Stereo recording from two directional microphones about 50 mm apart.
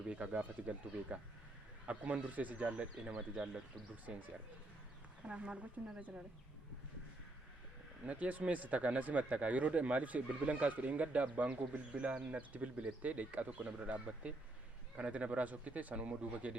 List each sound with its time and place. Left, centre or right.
0.3 s speech: right
4.0 s speech: right
8.0 s speech: right